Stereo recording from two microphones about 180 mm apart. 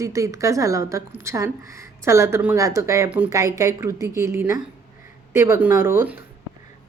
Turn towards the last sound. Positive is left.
turn(degrees=-10)  # may be behind; listen again after turning